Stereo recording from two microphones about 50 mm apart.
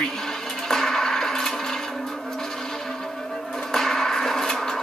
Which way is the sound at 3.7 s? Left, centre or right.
Centre.